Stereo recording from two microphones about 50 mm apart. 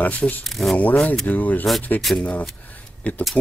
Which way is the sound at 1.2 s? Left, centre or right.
Left.